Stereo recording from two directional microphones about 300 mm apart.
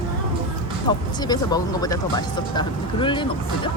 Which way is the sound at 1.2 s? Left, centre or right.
Centre.